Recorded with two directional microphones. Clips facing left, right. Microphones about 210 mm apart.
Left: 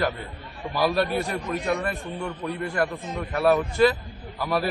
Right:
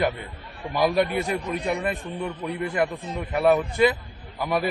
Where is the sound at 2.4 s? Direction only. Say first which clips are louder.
Left 1 dB; 15° right (ahead or behind).